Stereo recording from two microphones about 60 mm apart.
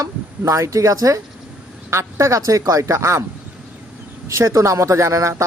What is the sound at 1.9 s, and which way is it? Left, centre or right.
A man's voice, right.